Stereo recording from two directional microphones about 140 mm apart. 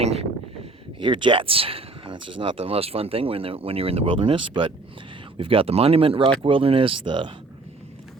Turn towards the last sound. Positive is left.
turn(degrees=-35)  # may be behind; listen again after turning